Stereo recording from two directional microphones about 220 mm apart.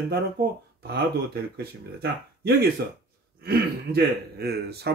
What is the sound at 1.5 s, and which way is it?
Speech, 45° right (ahead or behind).